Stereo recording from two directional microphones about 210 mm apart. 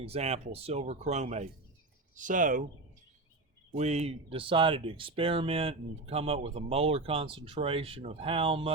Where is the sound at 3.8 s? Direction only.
30° right (ahead or behind).